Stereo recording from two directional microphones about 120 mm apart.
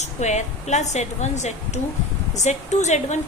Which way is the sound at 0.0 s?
75° left (ahead or behind).